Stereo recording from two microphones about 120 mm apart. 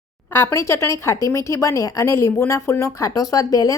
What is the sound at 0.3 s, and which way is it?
A woman's voice, 20° left (ahead or behind).